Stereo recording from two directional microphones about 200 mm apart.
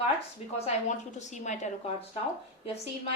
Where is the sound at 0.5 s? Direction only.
35° left (ahead or behind).